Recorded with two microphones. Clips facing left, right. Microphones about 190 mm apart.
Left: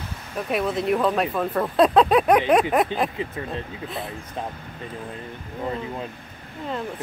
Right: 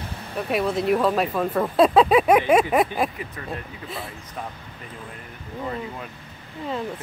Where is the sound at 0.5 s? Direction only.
Centre (ahead or behind).